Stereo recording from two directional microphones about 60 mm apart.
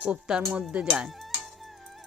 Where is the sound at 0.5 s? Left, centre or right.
Centre.